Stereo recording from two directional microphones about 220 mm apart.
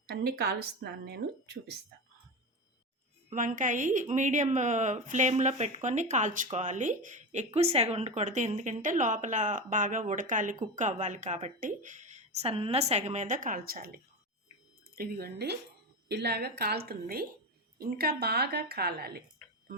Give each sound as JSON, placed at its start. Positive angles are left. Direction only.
{"t": 0.1, "sound": "speech", "side_deg": -45}
{"t": 3.2, "sound": "a woman's voice", "side_deg": -35}